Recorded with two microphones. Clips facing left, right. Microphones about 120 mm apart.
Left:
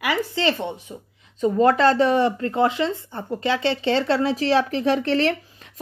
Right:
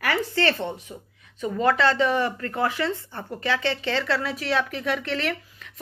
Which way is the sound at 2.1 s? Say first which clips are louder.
Left 5 dB; 25° left (ahead or behind).